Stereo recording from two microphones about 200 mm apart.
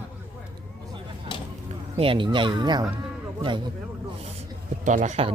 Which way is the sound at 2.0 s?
25° right (ahead or behind).